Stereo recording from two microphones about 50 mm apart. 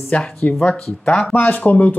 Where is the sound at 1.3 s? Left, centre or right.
Left.